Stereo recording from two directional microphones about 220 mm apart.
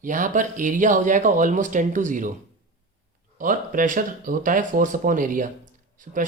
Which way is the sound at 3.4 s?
35° right (ahead or behind).